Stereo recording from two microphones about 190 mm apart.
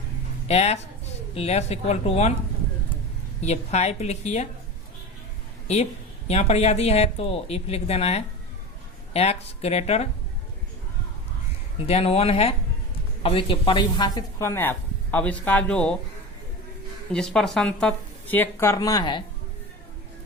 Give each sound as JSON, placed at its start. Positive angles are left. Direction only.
{"t": 0.4, "sound": "speech", "side_deg": 35}
{"t": 3.4, "sound": "speech", "side_deg": 35}
{"t": 5.6, "sound": "speech", "side_deg": 35}
{"t": 11.9, "sound": "speech", "side_deg": 30}
{"t": 17.1, "sound": "speech", "side_deg": 5}